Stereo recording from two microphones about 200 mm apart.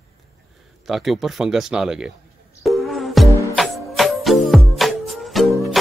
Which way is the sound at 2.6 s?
Centre (ahead or behind).